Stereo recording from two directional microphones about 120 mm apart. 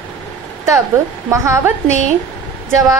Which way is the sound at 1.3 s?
25° right (ahead or behind).